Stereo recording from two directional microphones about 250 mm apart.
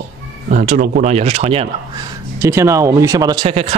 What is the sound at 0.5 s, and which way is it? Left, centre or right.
Speech, right.